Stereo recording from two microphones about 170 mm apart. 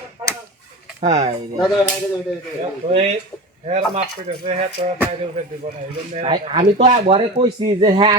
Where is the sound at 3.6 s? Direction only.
40° right (ahead or behind).